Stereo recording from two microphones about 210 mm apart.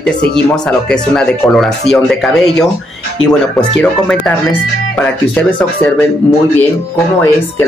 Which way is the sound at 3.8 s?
5° left (ahead or behind).